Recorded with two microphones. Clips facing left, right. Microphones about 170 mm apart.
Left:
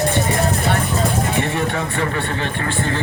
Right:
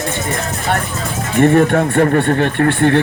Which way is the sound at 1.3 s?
50° right (ahead or behind).